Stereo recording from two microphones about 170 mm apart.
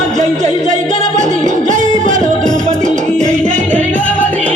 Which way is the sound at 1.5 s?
45° right (ahead or behind).